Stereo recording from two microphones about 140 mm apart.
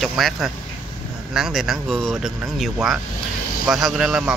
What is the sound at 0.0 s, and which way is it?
Speech, centre (ahead or behind).